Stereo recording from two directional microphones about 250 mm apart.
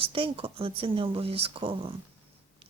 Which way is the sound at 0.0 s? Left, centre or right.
Right.